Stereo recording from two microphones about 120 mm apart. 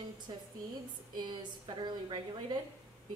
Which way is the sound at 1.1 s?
40° right (ahead or behind).